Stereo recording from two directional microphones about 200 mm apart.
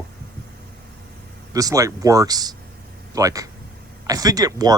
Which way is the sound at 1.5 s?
15° right (ahead or behind).